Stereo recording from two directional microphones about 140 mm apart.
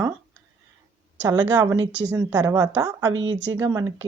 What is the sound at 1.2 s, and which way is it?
Speech, 25° right (ahead or behind).